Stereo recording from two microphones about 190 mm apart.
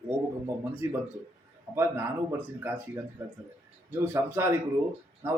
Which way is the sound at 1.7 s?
20° right (ahead or behind).